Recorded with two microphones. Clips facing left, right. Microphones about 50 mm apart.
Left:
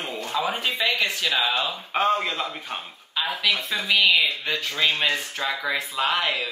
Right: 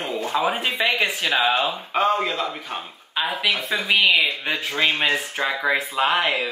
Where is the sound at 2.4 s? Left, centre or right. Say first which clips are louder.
Right 3 dB; centre; by 6.5 s right.